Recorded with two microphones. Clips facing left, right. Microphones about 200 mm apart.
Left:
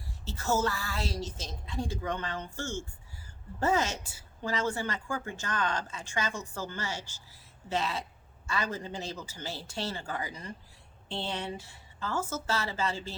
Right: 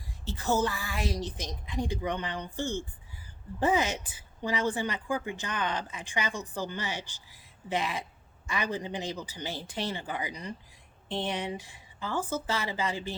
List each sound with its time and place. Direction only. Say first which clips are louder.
0.3 s a woman's voice: right 1 dB; 15° right (ahead or behind)